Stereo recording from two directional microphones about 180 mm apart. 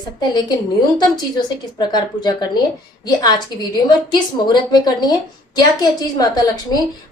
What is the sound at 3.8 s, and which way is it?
A woman's voice, 25° left (ahead or behind).